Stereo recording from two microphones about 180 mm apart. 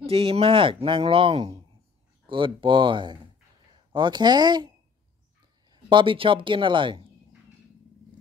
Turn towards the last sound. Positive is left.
turn(degrees=-25)  # may be behind; listen again after turning